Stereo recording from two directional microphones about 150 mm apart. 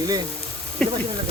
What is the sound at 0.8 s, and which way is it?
Speech, 5° left (ahead or behind).